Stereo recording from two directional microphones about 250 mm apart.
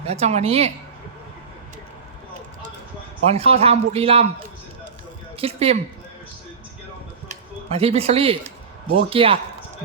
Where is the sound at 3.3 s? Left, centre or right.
Right.